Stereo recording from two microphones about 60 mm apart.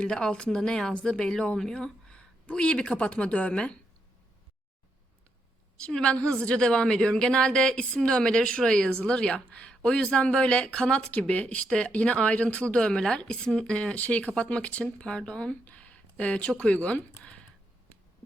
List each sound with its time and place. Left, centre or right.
0.0 s a woman's voice: centre
5.7 s a woman's voice: centre